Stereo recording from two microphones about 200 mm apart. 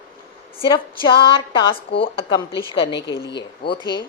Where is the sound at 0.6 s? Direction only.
25° left (ahead or behind).